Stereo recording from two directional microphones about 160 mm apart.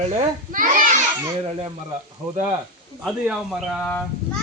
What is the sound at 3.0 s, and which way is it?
Speech, 5° right (ahead or behind).